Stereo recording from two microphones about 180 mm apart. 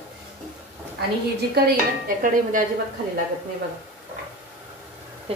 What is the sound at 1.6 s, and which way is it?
Speech, 55° right (ahead or behind).